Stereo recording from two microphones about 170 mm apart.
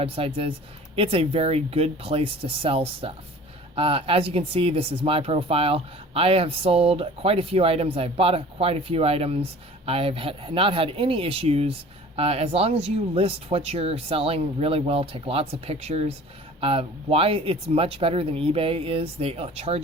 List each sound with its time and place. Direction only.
0.0 s speech: 35° right (ahead or behind)